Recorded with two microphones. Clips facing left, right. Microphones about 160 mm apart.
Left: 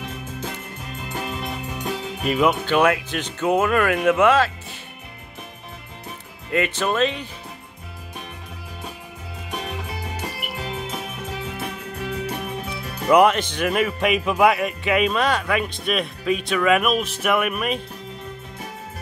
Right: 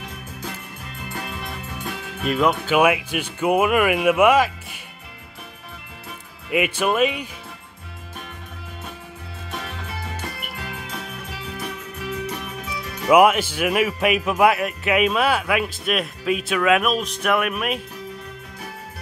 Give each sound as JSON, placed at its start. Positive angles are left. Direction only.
{"t": 1.0, "sound": "music", "side_deg": 20}
{"t": 2.2, "sound": "a man's voice", "side_deg": 5}
{"t": 2.6, "sound": "speech", "side_deg": -10}
{"t": 6.5, "sound": "speech", "side_deg": -10}
{"t": 9.5, "sound": "music", "side_deg": 15}
{"t": 13.1, "sound": "a man's voice", "side_deg": -5}